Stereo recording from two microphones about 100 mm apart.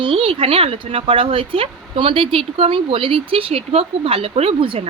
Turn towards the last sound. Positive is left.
turn(degrees=-65)  # may be behind; listen again after turning